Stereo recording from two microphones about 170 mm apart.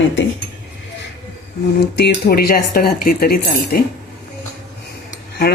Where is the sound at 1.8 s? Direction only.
75° left (ahead or behind).